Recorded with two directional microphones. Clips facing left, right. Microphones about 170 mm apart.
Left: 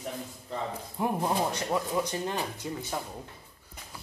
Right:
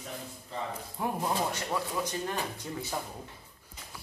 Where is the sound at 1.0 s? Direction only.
20° left (ahead or behind).